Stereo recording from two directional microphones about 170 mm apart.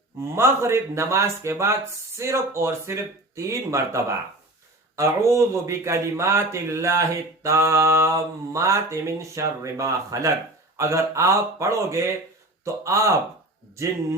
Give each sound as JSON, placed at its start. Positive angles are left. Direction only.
{"t": 0.2, "sound": "speech", "side_deg": -15}